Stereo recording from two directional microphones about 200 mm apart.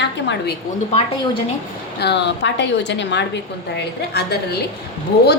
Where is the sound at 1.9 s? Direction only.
60° left (ahead or behind).